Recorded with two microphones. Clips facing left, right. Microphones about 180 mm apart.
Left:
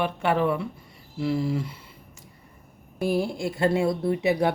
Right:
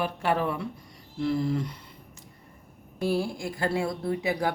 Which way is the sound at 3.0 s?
15° left (ahead or behind).